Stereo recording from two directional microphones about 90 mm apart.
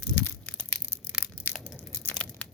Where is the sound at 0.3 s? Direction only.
15° left (ahead or behind).